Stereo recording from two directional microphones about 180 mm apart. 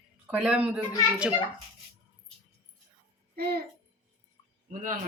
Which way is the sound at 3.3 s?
60° right (ahead or behind).